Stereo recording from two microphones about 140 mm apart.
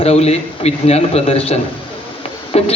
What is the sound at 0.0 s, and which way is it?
Speech, 50° left (ahead or behind).